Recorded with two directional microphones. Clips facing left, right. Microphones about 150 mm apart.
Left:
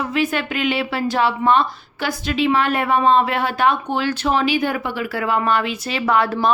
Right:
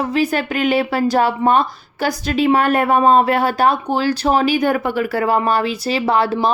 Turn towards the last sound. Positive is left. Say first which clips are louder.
# right 2 dB
turn(degrees=-30)  # may be behind; listen again after turning